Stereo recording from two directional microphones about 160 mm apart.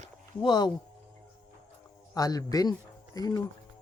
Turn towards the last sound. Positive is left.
turn(degrees=25)  # may be behind; listen again after turning